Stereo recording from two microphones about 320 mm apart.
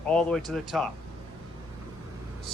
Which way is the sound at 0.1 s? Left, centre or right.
Centre.